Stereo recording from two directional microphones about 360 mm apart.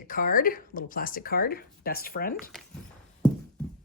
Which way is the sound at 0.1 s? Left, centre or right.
Left.